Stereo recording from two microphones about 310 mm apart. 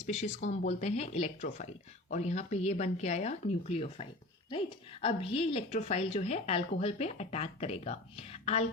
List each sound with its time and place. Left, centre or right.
0.0 s speech: left